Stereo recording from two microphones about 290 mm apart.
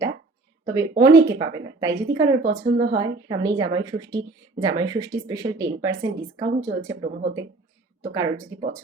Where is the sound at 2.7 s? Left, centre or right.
Right.